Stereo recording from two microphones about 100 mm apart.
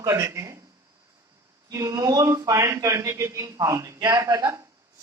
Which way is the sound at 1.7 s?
35° right (ahead or behind).